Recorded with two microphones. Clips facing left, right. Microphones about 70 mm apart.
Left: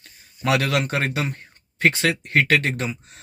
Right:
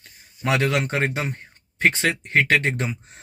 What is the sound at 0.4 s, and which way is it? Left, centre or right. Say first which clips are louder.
Speech: even; right.